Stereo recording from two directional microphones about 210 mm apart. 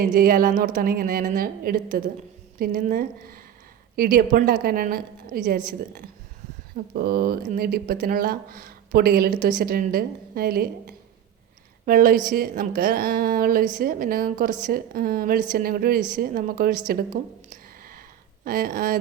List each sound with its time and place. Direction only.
0.0 s a woman's voice: 45° right (ahead or behind)
17.5 s a sound: 45° right (ahead or behind)
18.4 s a woman's voice: 40° right (ahead or behind)